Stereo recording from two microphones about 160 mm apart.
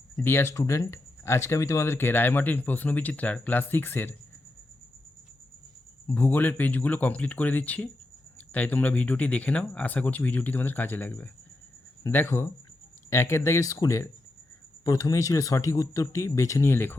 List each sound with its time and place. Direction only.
0.2 s speech: 15° left (ahead or behind)
6.1 s speech: 10° left (ahead or behind)